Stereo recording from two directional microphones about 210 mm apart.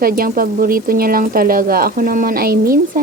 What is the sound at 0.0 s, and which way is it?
Speech, 40° right (ahead or behind).